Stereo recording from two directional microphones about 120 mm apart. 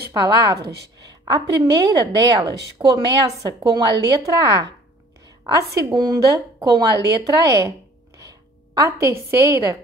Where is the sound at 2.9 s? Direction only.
30° right (ahead or behind).